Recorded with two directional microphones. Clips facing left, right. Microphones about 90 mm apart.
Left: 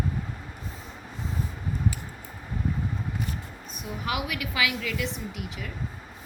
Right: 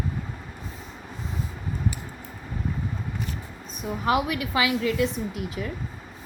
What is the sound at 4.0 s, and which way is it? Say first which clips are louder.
A woman's voice: right 7 dB; 35° right (ahead or behind).